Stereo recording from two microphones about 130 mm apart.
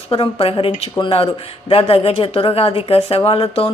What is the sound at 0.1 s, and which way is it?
Speech, 45° left (ahead or behind).